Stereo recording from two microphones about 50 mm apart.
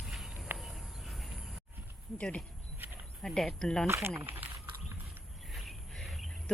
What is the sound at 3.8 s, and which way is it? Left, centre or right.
Speech, right.